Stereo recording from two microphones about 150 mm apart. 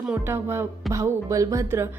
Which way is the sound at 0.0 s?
10° right (ahead or behind).